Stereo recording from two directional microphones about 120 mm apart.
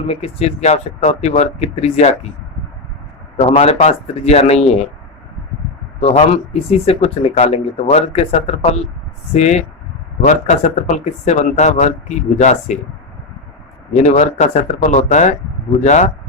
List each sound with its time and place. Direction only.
0.1 s speech: 60° left (ahead or behind)
3.4 s speech: 60° left (ahead or behind)
6.0 s speech: 60° left (ahead or behind)
10.2 s speech: 80° left
13.9 s speech: 70° left (ahead or behind)